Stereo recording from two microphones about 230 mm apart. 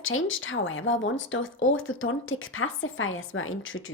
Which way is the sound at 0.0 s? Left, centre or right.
Left.